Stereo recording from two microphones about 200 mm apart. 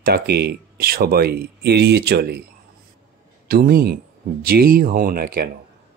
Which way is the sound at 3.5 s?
45° right (ahead or behind).